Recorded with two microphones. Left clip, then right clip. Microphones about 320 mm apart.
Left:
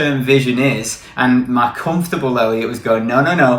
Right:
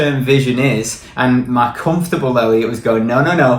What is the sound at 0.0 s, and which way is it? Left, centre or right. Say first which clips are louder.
Speech: even; centre.